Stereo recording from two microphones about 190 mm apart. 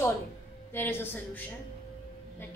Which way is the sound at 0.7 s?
10° left (ahead or behind).